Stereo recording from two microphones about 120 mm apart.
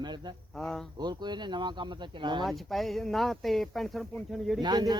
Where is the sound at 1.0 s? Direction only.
35° right (ahead or behind).